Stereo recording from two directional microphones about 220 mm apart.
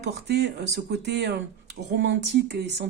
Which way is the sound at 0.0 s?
50° right (ahead or behind).